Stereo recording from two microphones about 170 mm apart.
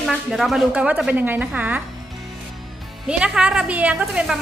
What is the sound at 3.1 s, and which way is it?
Speech, 5° right (ahead or behind).